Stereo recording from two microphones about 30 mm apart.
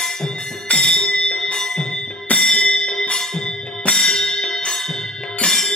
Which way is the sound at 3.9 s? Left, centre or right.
Centre.